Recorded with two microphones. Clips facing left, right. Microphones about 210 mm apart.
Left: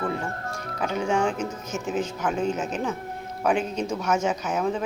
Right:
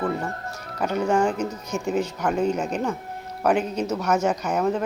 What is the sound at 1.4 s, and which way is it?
Speech, 60° right (ahead or behind).